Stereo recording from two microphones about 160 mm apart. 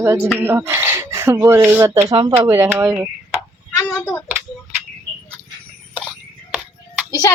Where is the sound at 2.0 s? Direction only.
30° right (ahead or behind).